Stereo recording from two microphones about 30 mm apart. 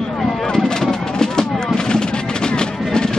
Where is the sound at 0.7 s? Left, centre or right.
Left.